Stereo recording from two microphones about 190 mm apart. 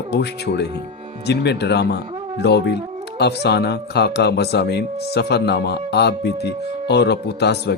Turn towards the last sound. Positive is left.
turn(degrees=60)  # may be behind; listen again after turning